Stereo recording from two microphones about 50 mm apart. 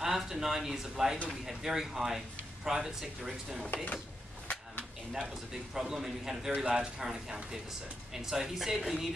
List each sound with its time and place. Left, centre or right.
0.0 s speech: centre
3.7 s speech: left
5.3 s speech: centre